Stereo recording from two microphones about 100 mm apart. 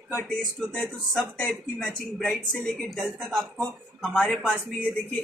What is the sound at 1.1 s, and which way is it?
Speech, 10° left (ahead or behind).